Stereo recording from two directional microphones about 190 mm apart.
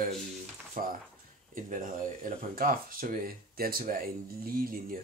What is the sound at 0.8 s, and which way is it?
Speech, 45° right (ahead or behind).